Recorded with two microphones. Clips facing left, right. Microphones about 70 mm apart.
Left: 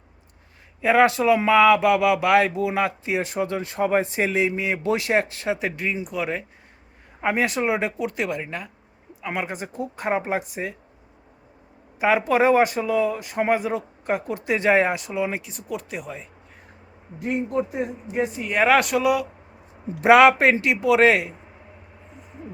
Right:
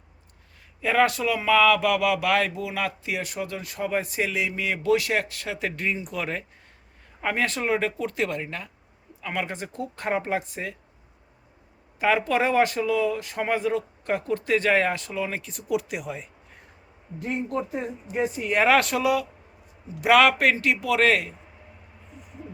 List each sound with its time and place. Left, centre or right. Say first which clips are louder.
0.8 s speech: left 4 dB; left; by 6.4 s centre
7.2 s speech: left 4 dB; centre
11.9 s speech: left 3 dB; centre
15.5 s speech: right 4 dB; centre
17.2 s speech: left 4 dB; centre
20.1 s speech: left 4 dB; left